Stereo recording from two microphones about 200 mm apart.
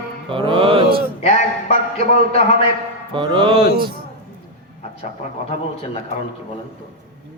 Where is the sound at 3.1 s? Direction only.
25° right (ahead or behind).